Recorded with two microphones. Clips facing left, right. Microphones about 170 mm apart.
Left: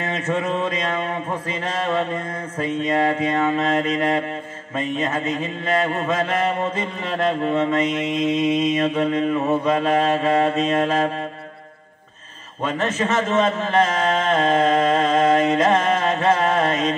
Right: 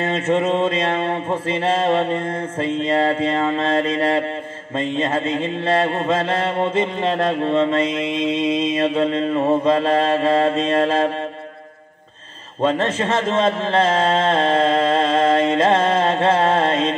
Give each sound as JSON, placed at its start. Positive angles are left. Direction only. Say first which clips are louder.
{"t": 0.0, "sound": "mantra", "louder": "right 5 dB", "side_deg": -25}
{"t": 12.6, "sound": "mantra", "louder": "right 3 dB", "side_deg": -30}